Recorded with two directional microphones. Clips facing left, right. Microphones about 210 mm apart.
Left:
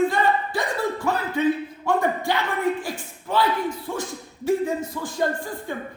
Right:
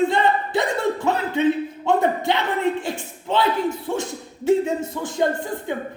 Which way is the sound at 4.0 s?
25° right (ahead or behind).